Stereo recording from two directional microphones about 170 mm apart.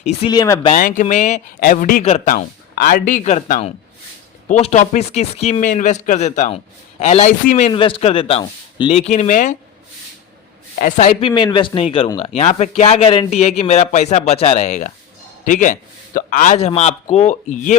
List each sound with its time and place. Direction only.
0.3 s speech: 20° left (ahead or behind)
0.7 s a man's voice: 50° left (ahead or behind)
1.6 s a man's voice: 50° left (ahead or behind)
2.2 s a man's voice: 60° left (ahead or behind)
7.7 s speech: 30° left (ahead or behind)
10.8 s a man's voice: 50° left (ahead or behind)
16.6 s speech: 40° left (ahead or behind)